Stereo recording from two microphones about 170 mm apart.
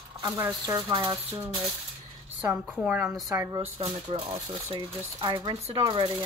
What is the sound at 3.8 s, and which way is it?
Speech, 35° right (ahead or behind).